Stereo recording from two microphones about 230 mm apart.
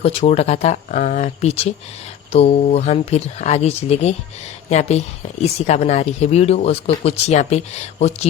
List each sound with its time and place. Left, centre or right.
0.0 s speech: left